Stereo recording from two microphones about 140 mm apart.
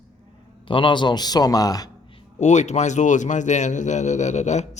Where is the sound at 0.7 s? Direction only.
35° left (ahead or behind).